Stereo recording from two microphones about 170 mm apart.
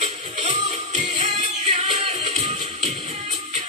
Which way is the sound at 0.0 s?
40° right (ahead or behind).